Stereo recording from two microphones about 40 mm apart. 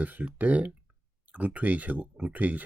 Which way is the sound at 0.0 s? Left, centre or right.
Right.